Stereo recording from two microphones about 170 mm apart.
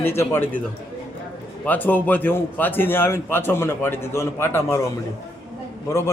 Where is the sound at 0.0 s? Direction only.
15° left (ahead or behind).